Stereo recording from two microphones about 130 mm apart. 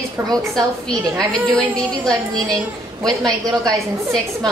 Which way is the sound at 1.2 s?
5° left (ahead or behind).